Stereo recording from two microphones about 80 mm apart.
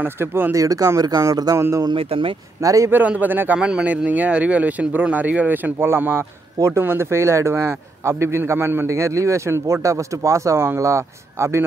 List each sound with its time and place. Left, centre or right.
0.0 s speech: right
0.6 s speech: right
1.8 s speech: right
2.6 s speech: right
2.9 s a man's voice: right